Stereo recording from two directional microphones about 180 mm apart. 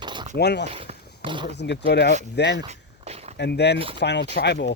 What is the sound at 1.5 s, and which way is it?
Speech, 75° left (ahead or behind).